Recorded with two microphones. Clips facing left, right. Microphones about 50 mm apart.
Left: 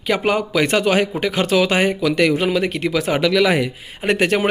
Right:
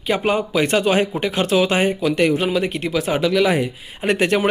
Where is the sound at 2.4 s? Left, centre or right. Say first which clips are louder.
Left 1 dB; left.